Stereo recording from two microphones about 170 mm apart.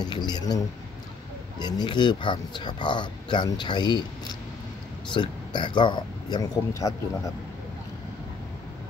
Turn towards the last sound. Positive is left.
turn(degrees=20)  # may be behind; listen again after turning